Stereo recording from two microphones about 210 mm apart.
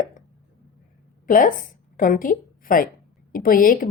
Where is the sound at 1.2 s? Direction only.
40° left (ahead or behind).